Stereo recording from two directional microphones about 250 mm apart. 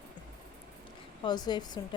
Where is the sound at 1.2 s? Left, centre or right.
Centre.